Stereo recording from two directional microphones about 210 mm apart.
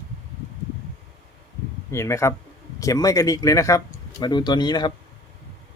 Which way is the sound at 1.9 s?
15° left (ahead or behind).